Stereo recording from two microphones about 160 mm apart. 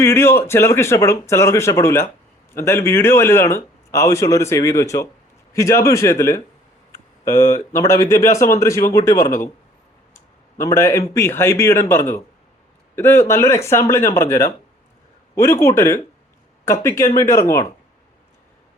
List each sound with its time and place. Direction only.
0.0 s a man's voice: 15° left (ahead or behind)
10.6 s a man's voice: 20° left (ahead or behind)